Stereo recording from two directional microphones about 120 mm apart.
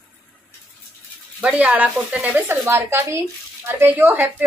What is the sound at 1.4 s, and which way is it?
A woman's voice, 10° right (ahead or behind).